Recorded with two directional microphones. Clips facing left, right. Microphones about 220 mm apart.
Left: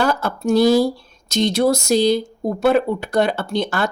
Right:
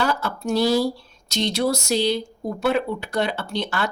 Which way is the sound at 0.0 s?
50° left (ahead or behind).